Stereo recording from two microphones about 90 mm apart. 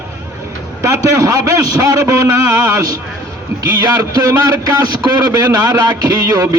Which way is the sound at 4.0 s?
40° right (ahead or behind).